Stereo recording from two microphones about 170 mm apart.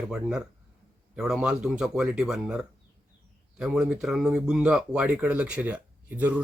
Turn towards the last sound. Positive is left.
turn(degrees=-10)  # may be behind; listen again after turning